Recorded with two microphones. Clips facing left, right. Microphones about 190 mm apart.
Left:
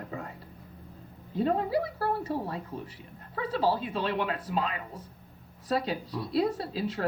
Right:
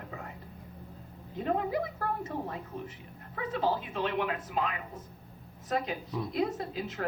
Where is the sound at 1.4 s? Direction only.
30° left (ahead or behind).